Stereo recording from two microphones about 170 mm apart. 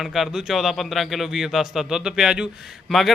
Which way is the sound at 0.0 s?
Centre (ahead or behind).